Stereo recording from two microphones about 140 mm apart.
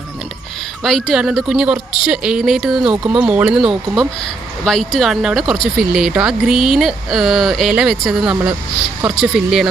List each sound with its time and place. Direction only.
0.8 s speech: centre (ahead or behind)